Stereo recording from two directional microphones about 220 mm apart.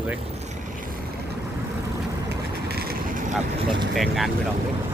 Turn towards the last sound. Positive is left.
turn(degrees=0)  # may be behind; listen again after turning